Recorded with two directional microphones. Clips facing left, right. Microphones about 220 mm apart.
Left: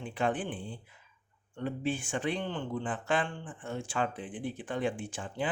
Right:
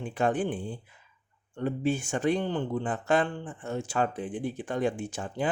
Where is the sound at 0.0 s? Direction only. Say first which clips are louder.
Right 5 dB; 45° right (ahead or behind).